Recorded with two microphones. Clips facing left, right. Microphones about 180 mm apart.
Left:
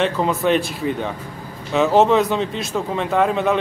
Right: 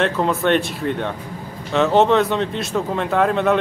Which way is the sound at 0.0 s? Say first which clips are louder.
Even; centre (ahead or behind).